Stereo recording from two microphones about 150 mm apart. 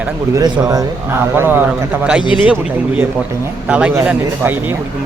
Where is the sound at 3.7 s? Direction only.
10° right (ahead or behind).